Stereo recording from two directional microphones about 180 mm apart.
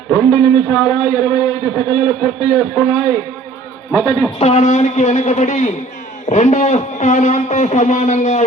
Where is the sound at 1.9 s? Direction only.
20° left (ahead or behind).